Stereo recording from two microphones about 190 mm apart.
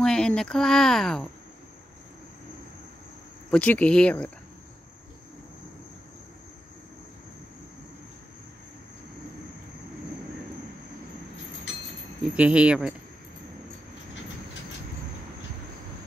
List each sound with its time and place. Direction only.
0.0 s speech: 5° left (ahead or behind)
3.4 s speech: 10° left (ahead or behind)
11.7 s train: 65° left (ahead or behind)
12.4 s speech: 5° right (ahead or behind)